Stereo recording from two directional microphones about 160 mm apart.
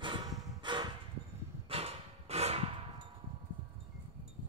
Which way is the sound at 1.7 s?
40° right (ahead or behind).